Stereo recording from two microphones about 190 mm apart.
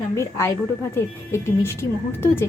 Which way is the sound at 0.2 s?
15° left (ahead or behind).